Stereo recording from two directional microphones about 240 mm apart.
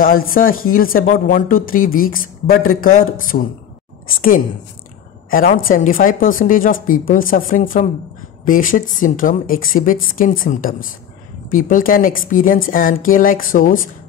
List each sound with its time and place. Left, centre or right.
0.0 s a woman's voice: left